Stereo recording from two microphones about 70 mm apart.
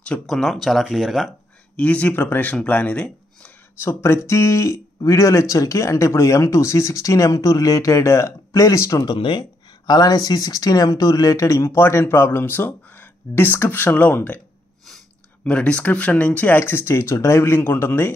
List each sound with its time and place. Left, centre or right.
0.3 s speech: centre
1.8 s speech: centre
2.1 s speech: left
3.8 s speech: left
9.0 s speech: left
15.4 s speech: centre; by 18.1 s left